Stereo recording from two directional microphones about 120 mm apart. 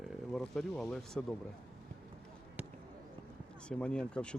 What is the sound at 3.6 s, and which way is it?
Speech, 10° left (ahead or behind).